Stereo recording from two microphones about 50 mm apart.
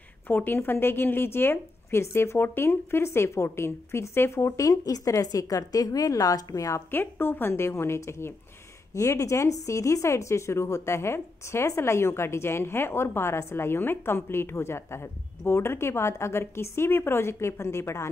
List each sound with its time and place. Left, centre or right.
0.3 s speech: left
4.5 s a woman's voice: left
6.9 s speech: left
8.9 s speech: left